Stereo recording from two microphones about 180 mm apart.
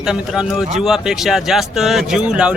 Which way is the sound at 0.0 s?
5° right (ahead or behind).